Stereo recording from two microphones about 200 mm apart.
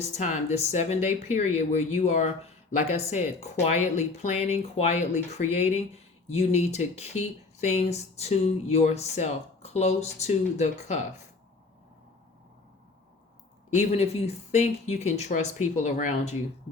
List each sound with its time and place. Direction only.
0.1 s speech: 35° left (ahead or behind)
13.7 s speech: 30° left (ahead or behind)